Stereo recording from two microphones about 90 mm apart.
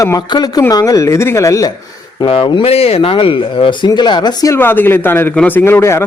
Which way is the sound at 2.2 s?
85° left.